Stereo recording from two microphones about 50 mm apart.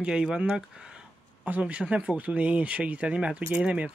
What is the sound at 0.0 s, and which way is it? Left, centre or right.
Speech, centre.